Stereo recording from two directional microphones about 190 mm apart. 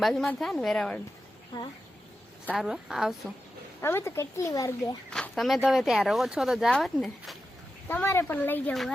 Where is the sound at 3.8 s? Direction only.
15° left (ahead or behind).